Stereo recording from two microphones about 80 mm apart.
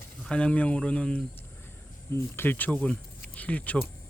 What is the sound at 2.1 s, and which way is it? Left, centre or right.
Speech, left.